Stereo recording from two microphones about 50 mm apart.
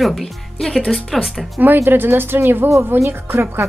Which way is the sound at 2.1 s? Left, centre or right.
Right.